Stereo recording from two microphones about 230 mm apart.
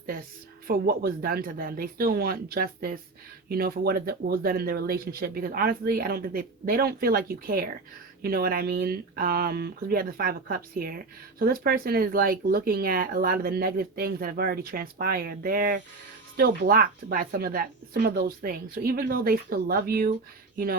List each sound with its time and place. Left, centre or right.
0.7 s speech: right